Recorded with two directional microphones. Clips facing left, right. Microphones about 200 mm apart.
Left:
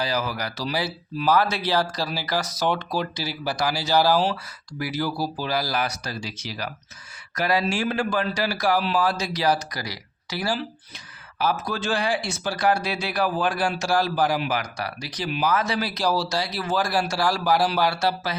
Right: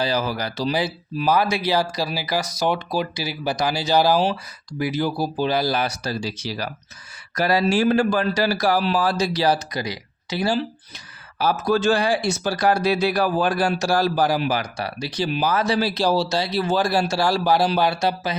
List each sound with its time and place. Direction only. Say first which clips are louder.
0.0 s speech: right 3 dB; 30° right (ahead or behind)
10.9 s speech: right 1 dB; 40° right (ahead or behind); by 18.3 s 20° right (ahead or behind)